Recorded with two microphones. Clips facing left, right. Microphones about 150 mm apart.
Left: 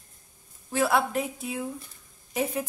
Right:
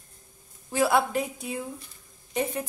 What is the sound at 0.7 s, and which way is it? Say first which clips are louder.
A woman's voice: right 1 dB; centre (ahead or behind).